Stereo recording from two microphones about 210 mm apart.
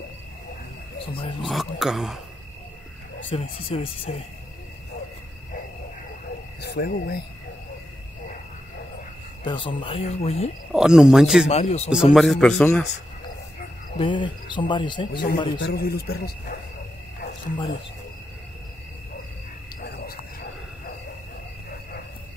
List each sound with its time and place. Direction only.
0.9 s speech: 25° left (ahead or behind)
1.4 s speech: centre (ahead or behind)
3.3 s speech: 25° left (ahead or behind)
6.6 s speech: 50° left (ahead or behind)
9.4 s speech: 25° left (ahead or behind)
10.7 s speech: 5° right (ahead or behind)
11.4 s speech: 30° left (ahead or behind)
11.9 s speech: 5° right (ahead or behind)
13.9 s speech: 25° left (ahead or behind)
15.6 s speech: 45° left (ahead or behind)
19.8 s a sound: 45° left (ahead or behind)